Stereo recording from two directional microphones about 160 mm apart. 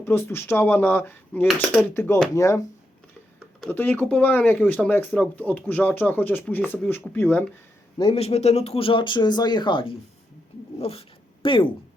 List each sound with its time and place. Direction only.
0.0 s speech: 15° left (ahead or behind)
3.7 s speech: 10° left (ahead or behind)
8.1 s speech: 40° left (ahead or behind)